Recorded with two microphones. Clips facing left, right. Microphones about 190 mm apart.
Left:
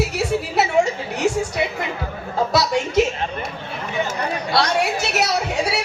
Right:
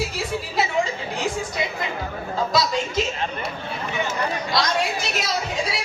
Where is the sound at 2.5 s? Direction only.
70° left (ahead or behind).